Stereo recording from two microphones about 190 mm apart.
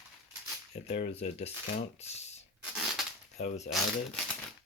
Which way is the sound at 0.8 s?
35° left (ahead or behind).